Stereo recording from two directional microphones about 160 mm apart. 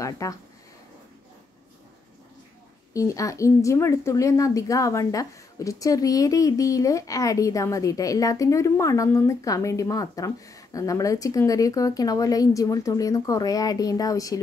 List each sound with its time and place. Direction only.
0.0 s speech: 20° left (ahead or behind)
2.9 s a woman's voice: 20° left (ahead or behind)